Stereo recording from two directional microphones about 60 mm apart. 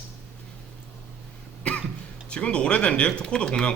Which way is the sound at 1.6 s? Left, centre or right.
Centre.